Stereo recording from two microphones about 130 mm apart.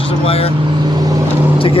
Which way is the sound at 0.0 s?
50° left (ahead or behind).